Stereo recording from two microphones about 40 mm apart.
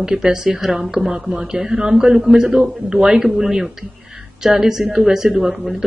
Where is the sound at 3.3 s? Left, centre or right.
Centre.